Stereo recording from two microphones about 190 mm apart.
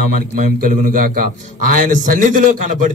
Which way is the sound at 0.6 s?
45° right (ahead or behind).